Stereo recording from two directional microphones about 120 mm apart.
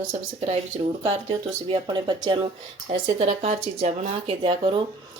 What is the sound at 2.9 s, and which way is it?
A woman's voice, 60° right (ahead or behind).